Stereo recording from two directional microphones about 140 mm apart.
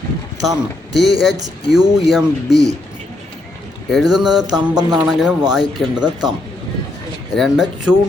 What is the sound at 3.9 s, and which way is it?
Speech, centre (ahead or behind).